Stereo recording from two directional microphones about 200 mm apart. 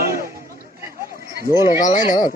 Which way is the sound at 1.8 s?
40° left (ahead or behind).